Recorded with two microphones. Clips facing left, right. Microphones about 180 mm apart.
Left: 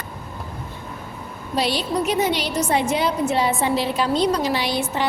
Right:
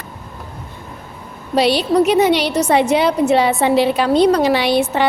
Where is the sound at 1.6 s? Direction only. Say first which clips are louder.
Right 8 dB; 70° right (ahead or behind).